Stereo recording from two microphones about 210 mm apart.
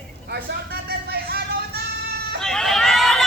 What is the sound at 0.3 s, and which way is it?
Vehicle, 50° right (ahead or behind).